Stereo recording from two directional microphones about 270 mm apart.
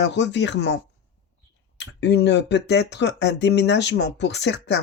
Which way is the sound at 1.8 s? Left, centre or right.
Left.